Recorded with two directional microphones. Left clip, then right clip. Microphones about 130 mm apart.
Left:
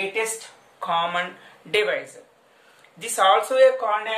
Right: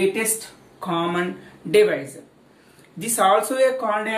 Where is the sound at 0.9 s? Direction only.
35° left (ahead or behind).